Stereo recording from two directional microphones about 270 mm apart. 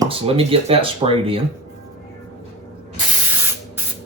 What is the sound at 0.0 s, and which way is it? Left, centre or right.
Speech, right.